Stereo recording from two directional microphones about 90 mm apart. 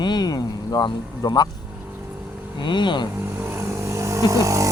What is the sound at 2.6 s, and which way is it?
Speech, 60° left (ahead or behind).